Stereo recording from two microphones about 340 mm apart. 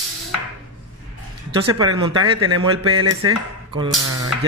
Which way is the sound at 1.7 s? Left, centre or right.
Centre.